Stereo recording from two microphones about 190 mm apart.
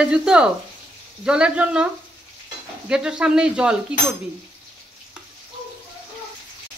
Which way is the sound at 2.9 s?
5° right (ahead or behind).